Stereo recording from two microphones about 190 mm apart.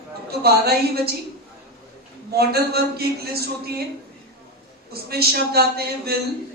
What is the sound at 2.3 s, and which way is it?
A man's voice, 55° right (ahead or behind).